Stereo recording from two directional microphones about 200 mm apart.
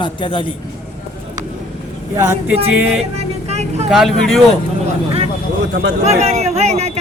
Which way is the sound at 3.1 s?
30° right (ahead or behind).